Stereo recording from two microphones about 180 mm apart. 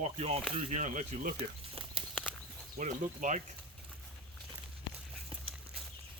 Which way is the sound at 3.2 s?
45° right (ahead or behind).